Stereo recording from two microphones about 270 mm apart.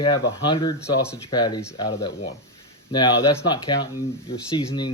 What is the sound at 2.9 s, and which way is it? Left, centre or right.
Speech, centre.